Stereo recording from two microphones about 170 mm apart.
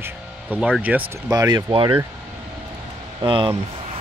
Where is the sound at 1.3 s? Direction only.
25° right (ahead or behind).